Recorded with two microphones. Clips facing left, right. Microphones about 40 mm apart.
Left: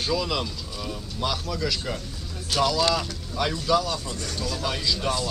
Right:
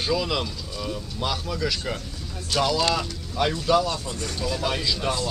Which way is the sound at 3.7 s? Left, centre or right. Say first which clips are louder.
Right 2 dB; right.